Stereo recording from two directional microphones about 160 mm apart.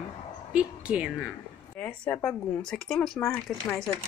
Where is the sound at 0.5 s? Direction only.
5° right (ahead or behind).